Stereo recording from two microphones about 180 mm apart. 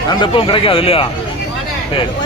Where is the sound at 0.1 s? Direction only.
25° left (ahead or behind).